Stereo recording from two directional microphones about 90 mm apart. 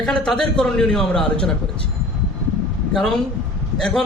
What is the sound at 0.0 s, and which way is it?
Speech, 10° left (ahead or behind).